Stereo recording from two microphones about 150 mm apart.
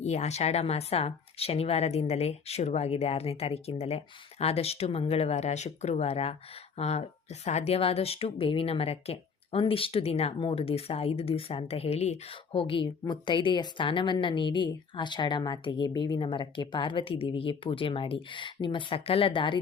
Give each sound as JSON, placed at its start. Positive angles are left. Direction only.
{"t": 0.0, "sound": "a woman's voice", "side_deg": 50}
{"t": 12.5, "sound": "a woman's voice", "side_deg": 35}